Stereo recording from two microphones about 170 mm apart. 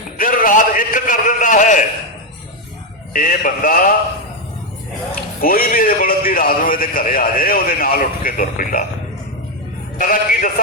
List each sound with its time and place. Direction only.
0.2 s a sound: 55° left (ahead or behind)
3.1 s a man's voice: 55° left (ahead or behind)
5.4 s a man's voice: 60° left (ahead or behind)
10.0 s a man's voice: 55° left (ahead or behind)